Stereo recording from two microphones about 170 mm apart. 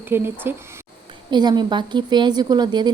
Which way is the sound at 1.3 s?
25° right (ahead or behind).